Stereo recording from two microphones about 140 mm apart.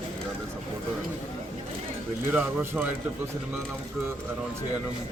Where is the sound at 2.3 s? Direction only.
15° right (ahead or behind).